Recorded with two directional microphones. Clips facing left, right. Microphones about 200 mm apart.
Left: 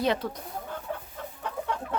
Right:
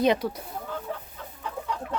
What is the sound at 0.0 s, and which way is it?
Speech, 15° right (ahead or behind).